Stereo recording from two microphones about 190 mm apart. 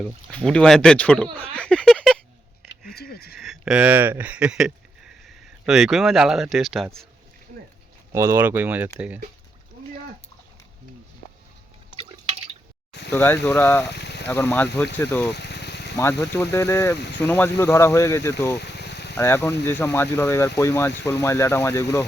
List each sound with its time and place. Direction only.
0.3 s speech: 5° left (ahead or behind)
2.9 s a sound: 55° left (ahead or behind)
3.3 s speech: centre (ahead or behind)
8.1 s speech: 15° right (ahead or behind)
13.1 s speech: 10° left (ahead or behind)
13.9 s speech: 60° left (ahead or behind)
14.3 s speech: 10° left (ahead or behind)
15.3 s a sound: 60° left (ahead or behind)
16.0 s speech: 15° left (ahead or behind)
18.6 s a sound: 60° left (ahead or behind)
19.1 s speech: 10° left (ahead or behind)